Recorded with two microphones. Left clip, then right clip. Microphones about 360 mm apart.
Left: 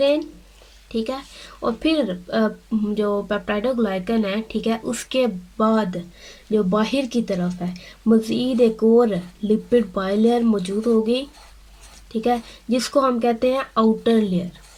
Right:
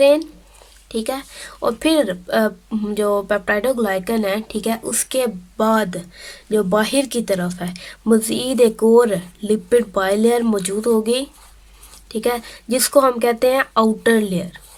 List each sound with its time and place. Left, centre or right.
0.9 s speech: centre